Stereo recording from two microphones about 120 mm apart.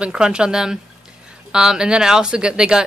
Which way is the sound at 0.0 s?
5° right (ahead or behind).